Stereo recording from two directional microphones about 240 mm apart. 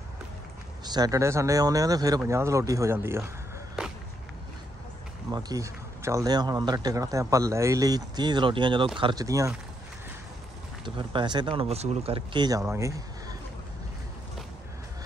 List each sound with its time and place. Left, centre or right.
0.8 s speech: centre
5.3 s speech: centre
10.8 s speech: centre